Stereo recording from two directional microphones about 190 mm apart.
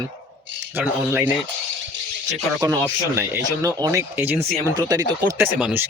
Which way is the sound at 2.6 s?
15° right (ahead or behind).